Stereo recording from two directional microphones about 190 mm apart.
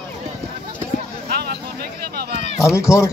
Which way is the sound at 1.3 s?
55° right (ahead or behind).